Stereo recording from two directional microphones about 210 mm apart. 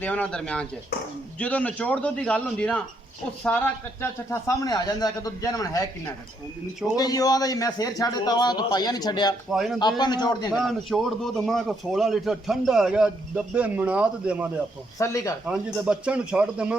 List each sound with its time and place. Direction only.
0.0 s a man's voice: 5° left (ahead or behind)
6.9 s speech: 15° left (ahead or behind)
9.5 s a man's voice: centre (ahead or behind)
10.0 s a man's voice: 20° left (ahead or behind)
10.5 s a man's voice: centre (ahead or behind)
14.9 s speech: 15° left (ahead or behind)
15.4 s a man's voice: 5° right (ahead or behind)